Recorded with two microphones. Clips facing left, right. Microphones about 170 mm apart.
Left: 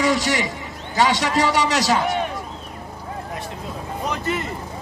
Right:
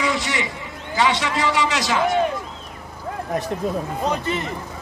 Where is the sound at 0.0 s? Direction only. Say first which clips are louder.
Left 4 dB; 40° left (ahead or behind).